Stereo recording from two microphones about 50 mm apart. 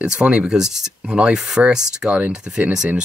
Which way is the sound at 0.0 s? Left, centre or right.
Centre.